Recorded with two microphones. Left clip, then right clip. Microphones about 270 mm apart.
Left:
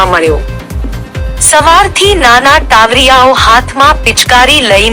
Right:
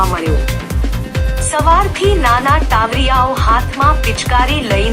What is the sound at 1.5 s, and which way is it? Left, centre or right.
A woman's voice, left.